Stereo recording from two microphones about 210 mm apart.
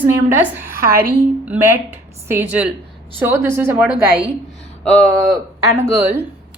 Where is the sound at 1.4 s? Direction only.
10° right (ahead or behind).